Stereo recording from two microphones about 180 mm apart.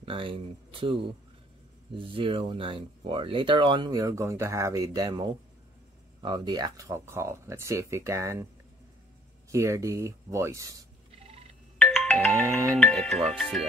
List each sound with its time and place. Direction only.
0.0 s speech: 30° right (ahead or behind)
9.5 s speech: 15° right (ahead or behind)
11.8 s music: centre (ahead or behind)
12.7 s speech: 5° left (ahead or behind)